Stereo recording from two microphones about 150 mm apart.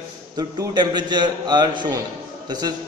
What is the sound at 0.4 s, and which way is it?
A man's voice, 30° right (ahead or behind).